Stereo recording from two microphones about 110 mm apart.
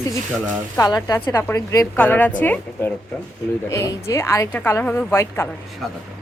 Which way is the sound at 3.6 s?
30° left (ahead or behind).